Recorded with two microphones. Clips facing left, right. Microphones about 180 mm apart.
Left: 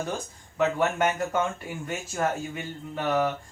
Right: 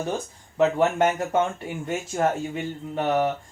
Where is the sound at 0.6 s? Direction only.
30° right (ahead or behind).